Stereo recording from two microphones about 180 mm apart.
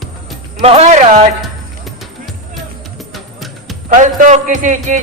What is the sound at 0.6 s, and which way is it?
Speech, 35° right (ahead or behind).